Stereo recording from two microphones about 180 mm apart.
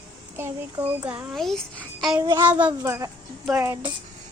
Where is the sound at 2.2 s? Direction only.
15° right (ahead or behind).